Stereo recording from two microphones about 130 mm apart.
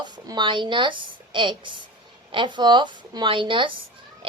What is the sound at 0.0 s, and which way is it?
A woman's voice, 35° right (ahead or behind).